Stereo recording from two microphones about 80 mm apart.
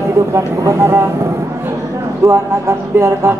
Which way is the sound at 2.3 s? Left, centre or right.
Right.